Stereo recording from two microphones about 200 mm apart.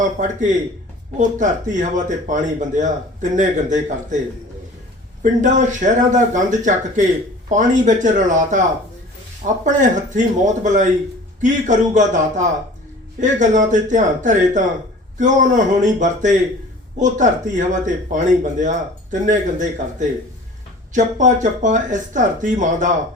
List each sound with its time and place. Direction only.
0.2 s speech: 40° right (ahead or behind)
5.2 s speech: 40° right (ahead or behind)
9.6 s speech: 40° right (ahead or behind)